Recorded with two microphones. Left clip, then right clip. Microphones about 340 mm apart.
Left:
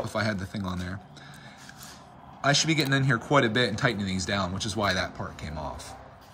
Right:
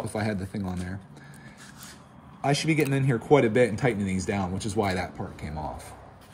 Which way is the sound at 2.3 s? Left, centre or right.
Centre.